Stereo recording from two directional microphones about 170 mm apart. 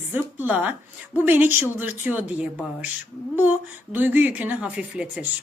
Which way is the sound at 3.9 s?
10° right (ahead or behind).